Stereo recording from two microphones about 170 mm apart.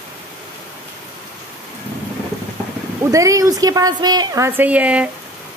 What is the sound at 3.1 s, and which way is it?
A woman's voice, 20° right (ahead or behind).